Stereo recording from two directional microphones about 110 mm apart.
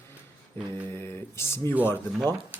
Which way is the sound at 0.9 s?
20° left (ahead or behind).